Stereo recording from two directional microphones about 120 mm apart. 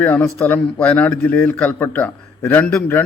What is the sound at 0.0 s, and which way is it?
A man's voice, 10° left (ahead or behind).